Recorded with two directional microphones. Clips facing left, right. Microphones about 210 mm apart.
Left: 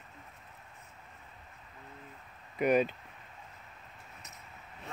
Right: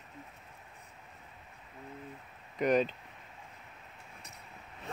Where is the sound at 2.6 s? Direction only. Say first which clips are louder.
Left 1 dB; 10° left (ahead or behind).